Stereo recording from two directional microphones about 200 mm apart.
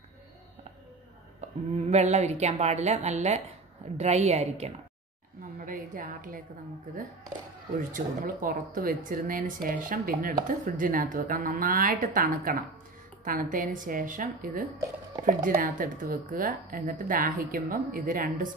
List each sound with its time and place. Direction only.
1.8 s a woman's voice: 35° right (ahead or behind)
7.9 s speech: 40° right (ahead or behind)